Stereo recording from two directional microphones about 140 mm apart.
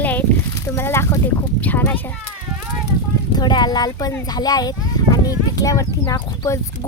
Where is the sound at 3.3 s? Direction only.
30° left (ahead or behind).